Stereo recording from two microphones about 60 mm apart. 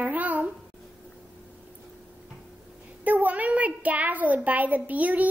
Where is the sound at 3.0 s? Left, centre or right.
Right.